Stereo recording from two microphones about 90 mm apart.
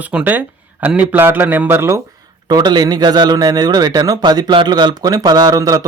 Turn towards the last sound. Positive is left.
turn(degrees=-40)  # may be behind; listen again after turning